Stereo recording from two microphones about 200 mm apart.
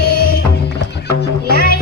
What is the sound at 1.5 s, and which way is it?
Music, 50° left (ahead or behind).